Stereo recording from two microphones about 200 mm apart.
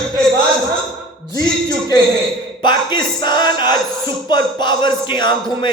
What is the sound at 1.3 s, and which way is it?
Speech, 20° left (ahead or behind).